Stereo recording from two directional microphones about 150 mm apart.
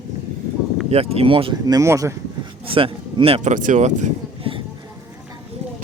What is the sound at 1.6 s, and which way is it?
Speech, 20° right (ahead or behind).